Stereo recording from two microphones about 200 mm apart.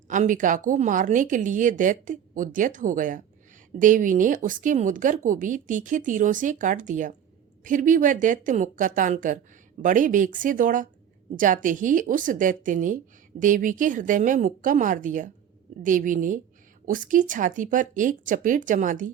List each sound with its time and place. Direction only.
0.1 s speech: 40° right (ahead or behind)